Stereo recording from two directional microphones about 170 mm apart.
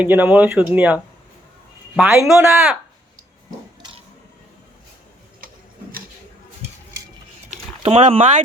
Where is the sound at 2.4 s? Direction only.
15° right (ahead or behind).